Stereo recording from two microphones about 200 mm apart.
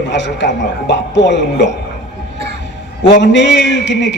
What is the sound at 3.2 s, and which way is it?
Speech, 60° left (ahead or behind).